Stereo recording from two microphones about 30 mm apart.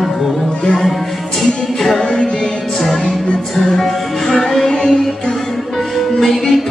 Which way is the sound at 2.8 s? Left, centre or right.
Centre.